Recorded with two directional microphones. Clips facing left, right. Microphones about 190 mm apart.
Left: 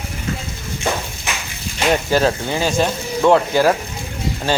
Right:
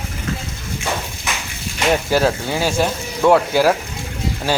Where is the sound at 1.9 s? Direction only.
5° right (ahead or behind).